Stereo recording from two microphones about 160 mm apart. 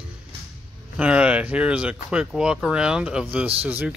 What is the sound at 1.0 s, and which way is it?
Speech, 10° right (ahead or behind).